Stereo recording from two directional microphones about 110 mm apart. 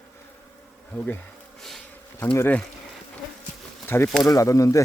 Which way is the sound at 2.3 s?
20° left (ahead or behind).